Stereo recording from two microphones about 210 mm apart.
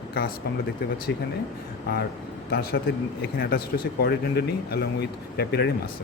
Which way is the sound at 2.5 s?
50° left (ahead or behind).